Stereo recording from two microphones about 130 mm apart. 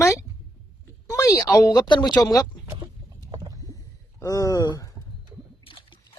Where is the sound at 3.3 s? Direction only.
30° right (ahead or behind).